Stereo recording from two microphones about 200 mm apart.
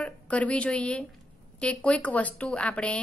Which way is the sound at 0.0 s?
5° left (ahead or behind).